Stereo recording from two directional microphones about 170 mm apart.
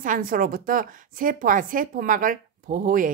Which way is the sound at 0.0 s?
55° right (ahead or behind).